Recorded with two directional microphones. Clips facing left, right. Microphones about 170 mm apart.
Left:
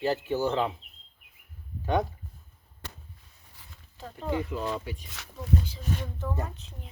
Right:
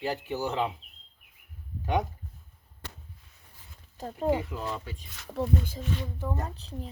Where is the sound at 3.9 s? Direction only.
40° right (ahead or behind).